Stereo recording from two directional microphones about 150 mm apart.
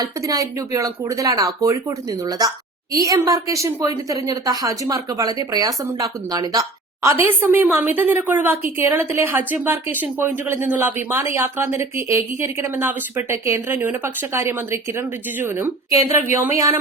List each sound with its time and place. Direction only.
0.0 s a woman's voice: 25° right (ahead or behind)
2.9 s a woman's voice: 20° right (ahead or behind)
7.2 s a woman's voice: 15° right (ahead or behind)